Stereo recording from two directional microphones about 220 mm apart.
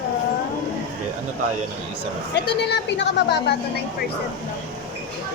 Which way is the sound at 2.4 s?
50° left (ahead or behind).